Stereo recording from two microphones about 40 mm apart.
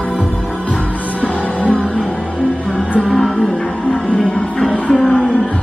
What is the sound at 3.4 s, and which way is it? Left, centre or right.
Music, left.